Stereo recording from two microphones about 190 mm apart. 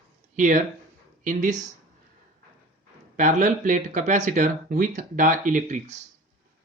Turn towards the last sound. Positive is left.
turn(degrees=-40)  # may be behind; listen again after turning